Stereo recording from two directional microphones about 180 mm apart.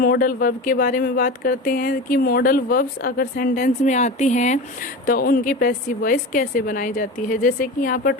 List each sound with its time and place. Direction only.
0.0 s speech: 50° left (ahead or behind)
5.0 s speech: 50° left (ahead or behind)